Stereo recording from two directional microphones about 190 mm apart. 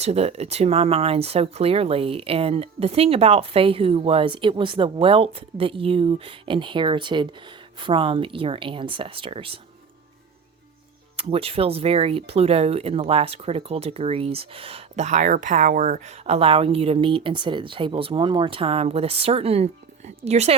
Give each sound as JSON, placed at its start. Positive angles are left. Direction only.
{"t": 0.0, "sound": "speech", "side_deg": -35}
{"t": 11.2, "sound": "speech", "side_deg": -30}